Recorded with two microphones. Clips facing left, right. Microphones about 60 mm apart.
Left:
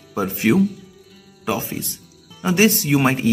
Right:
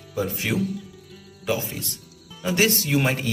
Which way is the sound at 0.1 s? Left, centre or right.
Left.